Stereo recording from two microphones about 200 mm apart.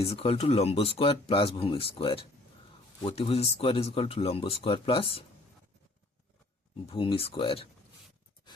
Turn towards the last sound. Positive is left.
turn(degrees=25)  # may be behind; listen again after turning